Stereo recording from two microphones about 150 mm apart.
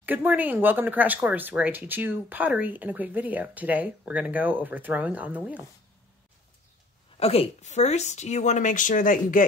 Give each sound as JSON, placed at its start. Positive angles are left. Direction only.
{"t": 0.0, "sound": "speech", "side_deg": -10}
{"t": 7.2, "sound": "speech", "side_deg": 40}